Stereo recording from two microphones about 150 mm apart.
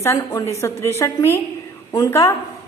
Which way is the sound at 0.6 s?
20° left (ahead or behind).